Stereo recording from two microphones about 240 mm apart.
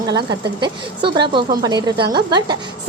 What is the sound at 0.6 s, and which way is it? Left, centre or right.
A woman's voice, centre.